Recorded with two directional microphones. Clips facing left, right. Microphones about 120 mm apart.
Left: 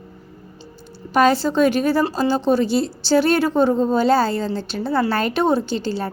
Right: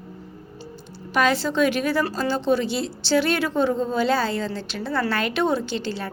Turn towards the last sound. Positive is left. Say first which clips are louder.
# left 4 dB
turn(degrees=35)  # may be behind; listen again after turning